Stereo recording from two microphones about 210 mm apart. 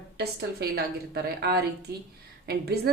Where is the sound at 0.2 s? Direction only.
50° right (ahead or behind).